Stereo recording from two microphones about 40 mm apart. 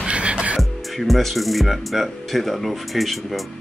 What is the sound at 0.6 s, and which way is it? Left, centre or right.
Speech, centre.